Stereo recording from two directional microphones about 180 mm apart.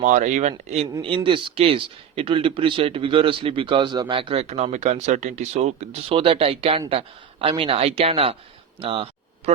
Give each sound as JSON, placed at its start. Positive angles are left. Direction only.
{"t": 0.0, "sound": "speech", "side_deg": -40}
{"t": 1.0, "sound": "speech", "side_deg": -30}